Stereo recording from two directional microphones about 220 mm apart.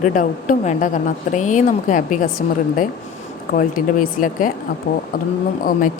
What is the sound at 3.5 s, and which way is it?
A woman's voice, 40° left (ahead or behind).